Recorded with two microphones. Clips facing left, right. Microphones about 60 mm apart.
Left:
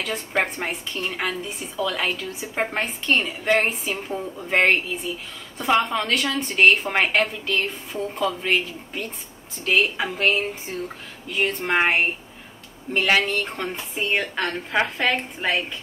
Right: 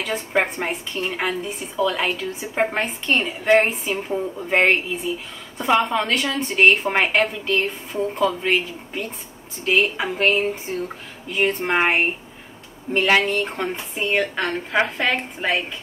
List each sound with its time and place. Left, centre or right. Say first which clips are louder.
0.0 s a woman's voice: right 3 dB; centre
3.3 s a woman's voice: right 4 dB; centre
7.4 s speech: right 3 dB; right
8.3 s a woman's voice: right 2 dB; centre
10.1 s a woman's voice: right 3 dB; right
13.2 s a woman's voice: right 3 dB; centre
13.9 s speech: right 2 dB; centre
14.2 s a woman's voice: right 2 dB; centre